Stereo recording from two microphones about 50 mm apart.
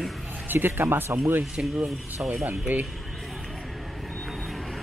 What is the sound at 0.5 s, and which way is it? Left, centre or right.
Speech, right.